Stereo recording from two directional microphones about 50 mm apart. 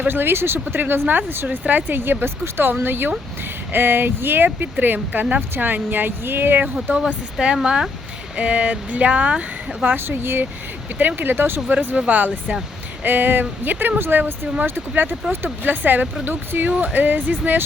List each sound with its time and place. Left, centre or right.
0.1 s speech: right
1.5 s speech: right
1.9 s speech: right
7.3 s speech: centre
9.8 s speech: right
11.7 s speech: right
14.4 s speech: right
15.2 s speech: centre
15.6 s speech: right
16.7 s speech: right